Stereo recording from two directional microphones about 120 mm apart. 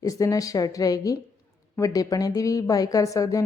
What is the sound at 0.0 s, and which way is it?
Speech, 30° left (ahead or behind).